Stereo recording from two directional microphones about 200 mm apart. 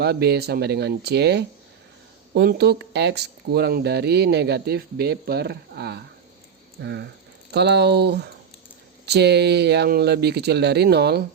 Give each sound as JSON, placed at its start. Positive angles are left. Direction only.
{"t": 0.0, "sound": "speech", "side_deg": -55}